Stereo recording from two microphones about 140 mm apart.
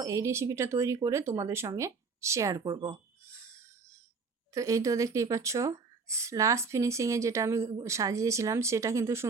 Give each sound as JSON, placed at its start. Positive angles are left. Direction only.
{"t": 0.0, "sound": "speech", "side_deg": -20}
{"t": 3.3, "sound": "a sound", "side_deg": -20}
{"t": 4.5, "sound": "speech", "side_deg": -25}